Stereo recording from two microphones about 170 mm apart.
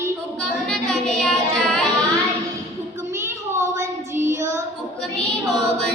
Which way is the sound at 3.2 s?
15° right (ahead or behind).